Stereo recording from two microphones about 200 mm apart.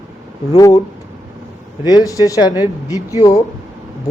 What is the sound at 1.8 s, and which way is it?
Speech, 20° left (ahead or behind).